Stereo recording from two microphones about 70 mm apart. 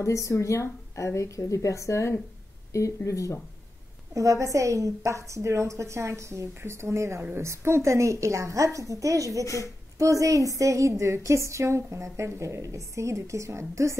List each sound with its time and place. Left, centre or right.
0.0 s speech: left
4.1 s a woman's voice: right